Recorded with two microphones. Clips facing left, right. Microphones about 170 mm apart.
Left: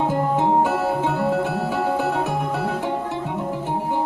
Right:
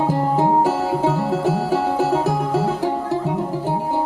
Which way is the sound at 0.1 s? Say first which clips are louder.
Right 2 dB; 35° right (ahead or behind).